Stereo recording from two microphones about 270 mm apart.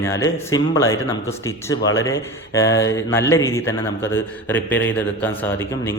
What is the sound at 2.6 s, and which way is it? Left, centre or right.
Speech, left.